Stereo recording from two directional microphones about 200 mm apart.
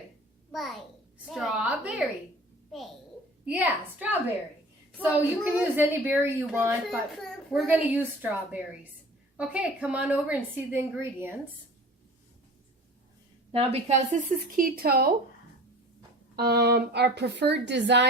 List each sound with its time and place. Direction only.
0.5 s a woman's voice: centre (ahead or behind)
3.4 s a woman's voice: 5° right (ahead or behind)
6.8 s a woman's voice: centre (ahead or behind)
13.5 s speech: 30° right (ahead or behind); by 15.1 s 50° right (ahead or behind)
16.3 s speech: 50° right (ahead or behind)